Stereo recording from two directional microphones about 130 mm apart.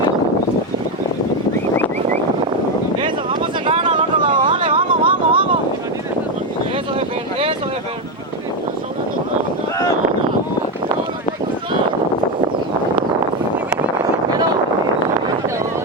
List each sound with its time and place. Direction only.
3.7 s vehicle: 40° right (ahead or behind)